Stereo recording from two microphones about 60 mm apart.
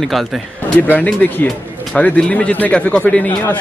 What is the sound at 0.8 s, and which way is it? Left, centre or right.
Speech, left.